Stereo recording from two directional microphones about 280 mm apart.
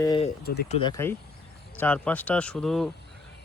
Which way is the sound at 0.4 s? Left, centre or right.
Left.